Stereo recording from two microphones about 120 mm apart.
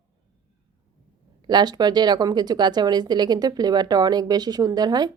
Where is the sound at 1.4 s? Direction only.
35° right (ahead or behind).